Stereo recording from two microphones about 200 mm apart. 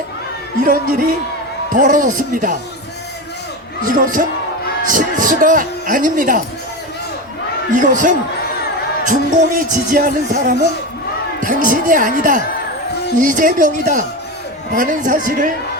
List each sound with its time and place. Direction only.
0.6 s speech: 45° right (ahead or behind)
3.8 s speech: 40° right (ahead or behind)
7.7 s speech: 40° right (ahead or behind)